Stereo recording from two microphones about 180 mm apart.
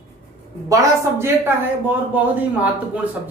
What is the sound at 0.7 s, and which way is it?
A woman's voice, 15° right (ahead or behind).